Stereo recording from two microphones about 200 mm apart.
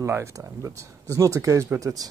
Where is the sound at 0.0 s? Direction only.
15° right (ahead or behind).